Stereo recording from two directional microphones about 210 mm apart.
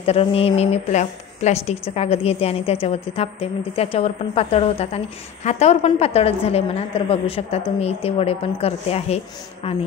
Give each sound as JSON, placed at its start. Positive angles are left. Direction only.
{"t": 0.0, "sound": "a woman's voice", "side_deg": 30}